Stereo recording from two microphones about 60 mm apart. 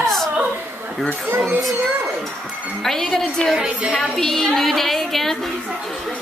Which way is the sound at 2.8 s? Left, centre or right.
Centre.